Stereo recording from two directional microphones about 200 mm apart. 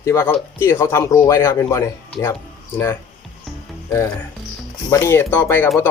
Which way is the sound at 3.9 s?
15° left (ahead or behind).